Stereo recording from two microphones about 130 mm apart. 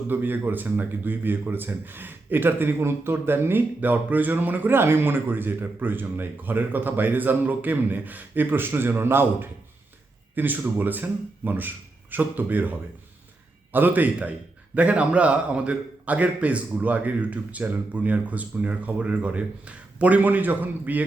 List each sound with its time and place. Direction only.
0.1 s speech: 15° right (ahead or behind)
13.7 s speech: 15° right (ahead or behind)